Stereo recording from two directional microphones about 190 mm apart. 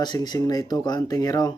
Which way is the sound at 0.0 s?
20° left (ahead or behind).